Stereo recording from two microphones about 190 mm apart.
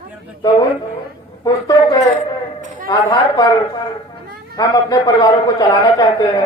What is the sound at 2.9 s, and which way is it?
Speech, 20° left (ahead or behind).